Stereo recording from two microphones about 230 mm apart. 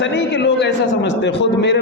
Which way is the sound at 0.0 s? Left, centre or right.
Left.